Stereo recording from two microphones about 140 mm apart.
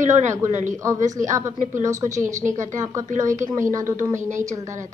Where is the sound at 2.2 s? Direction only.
60° right (ahead or behind).